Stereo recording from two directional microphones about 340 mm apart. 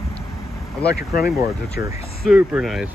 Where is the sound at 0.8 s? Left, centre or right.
Left.